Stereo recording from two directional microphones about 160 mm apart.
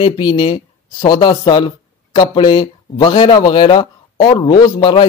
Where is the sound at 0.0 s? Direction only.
30° left (ahead or behind).